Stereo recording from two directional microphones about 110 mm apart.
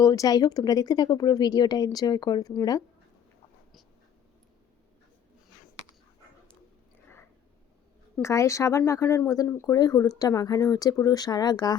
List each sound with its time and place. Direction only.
0.0 s speech: 35° left (ahead or behind)
8.2 s speech: 30° left (ahead or behind)